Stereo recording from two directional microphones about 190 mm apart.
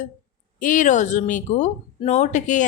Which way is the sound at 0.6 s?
40° left (ahead or behind).